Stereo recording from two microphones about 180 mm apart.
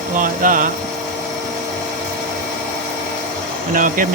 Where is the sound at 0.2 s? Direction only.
50° right (ahead or behind).